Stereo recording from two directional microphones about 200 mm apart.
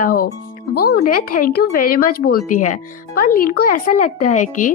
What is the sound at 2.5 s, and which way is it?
Speech, 40° left (ahead or behind).